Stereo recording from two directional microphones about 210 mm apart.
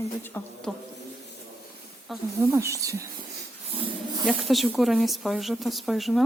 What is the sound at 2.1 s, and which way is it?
Speech, centre (ahead or behind).